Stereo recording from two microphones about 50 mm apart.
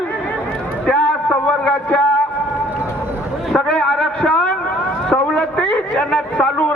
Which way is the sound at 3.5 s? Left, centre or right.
Centre.